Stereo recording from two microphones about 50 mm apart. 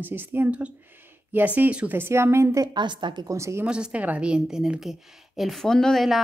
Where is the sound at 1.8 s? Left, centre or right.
Right.